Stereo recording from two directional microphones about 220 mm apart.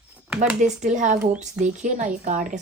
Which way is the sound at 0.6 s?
35° right (ahead or behind).